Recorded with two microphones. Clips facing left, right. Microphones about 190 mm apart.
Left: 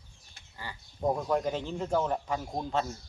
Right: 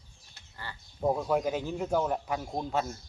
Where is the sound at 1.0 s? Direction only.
5° right (ahead or behind).